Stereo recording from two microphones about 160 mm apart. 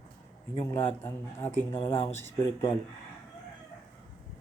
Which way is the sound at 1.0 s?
15° left (ahead or behind).